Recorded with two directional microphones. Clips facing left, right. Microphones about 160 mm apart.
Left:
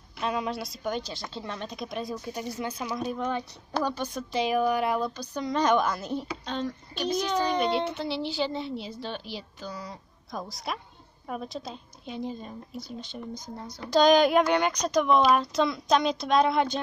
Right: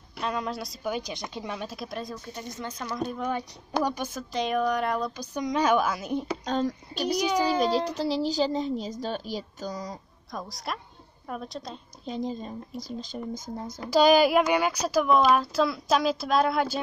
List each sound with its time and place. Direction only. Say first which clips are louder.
0.2 s speech: left 1 dB; centre (ahead or behind)
1.1 s a woman's voice: right 2 dB; 15° right (ahead or behind); by 3.3 s 5° left (ahead or behind)
3.3 s a woman's voice: even; 10° right (ahead or behind)
4.1 s speech: left 1 dB; centre (ahead or behind)
5.3 s a woman's voice: right 1 dB; 10° right (ahead or behind)
6.4 s speech: right 5 dB; 40° right (ahead or behind)
7.2 s a woman's voice: right 2 dB; 10° right (ahead or behind)
7.9 s a woman's voice: right 4 dB; 40° right (ahead or behind)
10.3 s speech: even; centre (ahead or behind)
12.1 s a woman's voice: right 3 dB; 35° right (ahead or behind)
13.8 s speech: even; 5° right (ahead or behind)